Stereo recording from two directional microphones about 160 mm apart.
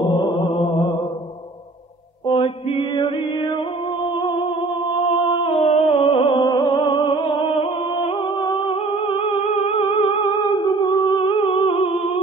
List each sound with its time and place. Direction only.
0.0 s mantra: 30° left (ahead or behind)
2.2 s mantra: 35° left (ahead or behind)
4.2 s humming: 35° left (ahead or behind)
5.1 s music: 35° left (ahead or behind)
8.0 s humming: 30° left (ahead or behind)